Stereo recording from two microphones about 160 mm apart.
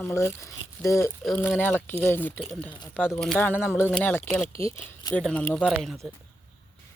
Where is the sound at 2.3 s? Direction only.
5° right (ahead or behind).